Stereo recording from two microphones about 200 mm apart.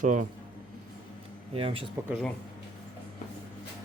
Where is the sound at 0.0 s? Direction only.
40° right (ahead or behind).